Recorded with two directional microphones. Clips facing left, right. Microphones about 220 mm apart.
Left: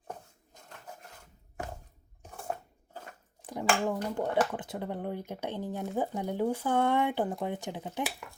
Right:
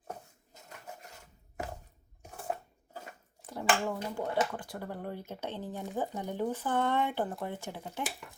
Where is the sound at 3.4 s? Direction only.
15° left (ahead or behind).